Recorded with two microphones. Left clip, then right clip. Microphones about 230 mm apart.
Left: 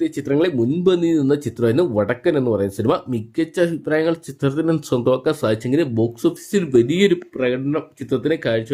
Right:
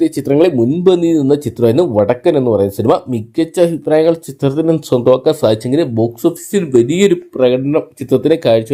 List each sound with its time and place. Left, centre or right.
0.0 s speech: centre
0.5 s speech: centre
7.4 s speech: centre